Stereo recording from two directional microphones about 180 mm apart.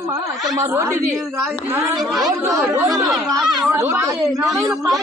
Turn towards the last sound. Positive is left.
turn(degrees=-15)  # may be behind; listen again after turning